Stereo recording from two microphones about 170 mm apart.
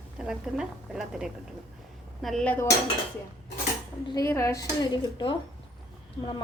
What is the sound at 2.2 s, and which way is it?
Dishes, 5° left (ahead or behind).